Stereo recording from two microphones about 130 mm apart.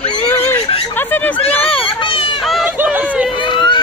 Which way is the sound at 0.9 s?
15° left (ahead or behind).